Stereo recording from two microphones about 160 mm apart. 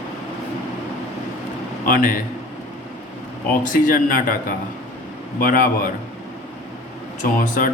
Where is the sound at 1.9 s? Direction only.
60° left (ahead or behind).